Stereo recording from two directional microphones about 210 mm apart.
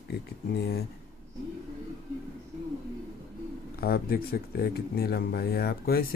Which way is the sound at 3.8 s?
45° left (ahead or behind).